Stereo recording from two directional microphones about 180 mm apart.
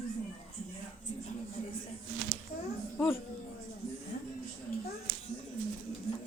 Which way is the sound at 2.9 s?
10° left (ahead or behind).